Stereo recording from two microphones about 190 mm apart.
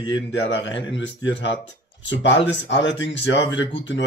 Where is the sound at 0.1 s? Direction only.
75° left (ahead or behind).